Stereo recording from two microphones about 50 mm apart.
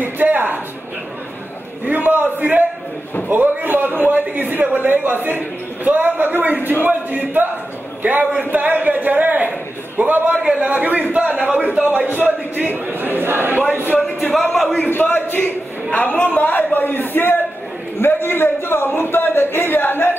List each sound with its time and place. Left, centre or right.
0.0 s a sound: right
1.9 s a man's voice: right
11.3 s a man's voice: centre
12.7 s speech: right
14.5 s a man's voice: centre
14.9 s a man's voice: left